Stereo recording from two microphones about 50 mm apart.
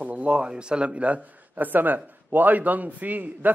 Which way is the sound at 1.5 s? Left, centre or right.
Right.